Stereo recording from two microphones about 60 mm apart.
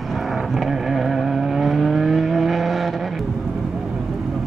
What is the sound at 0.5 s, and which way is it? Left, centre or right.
Vehicle, centre.